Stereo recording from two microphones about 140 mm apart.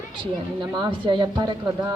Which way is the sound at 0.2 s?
35° right (ahead or behind).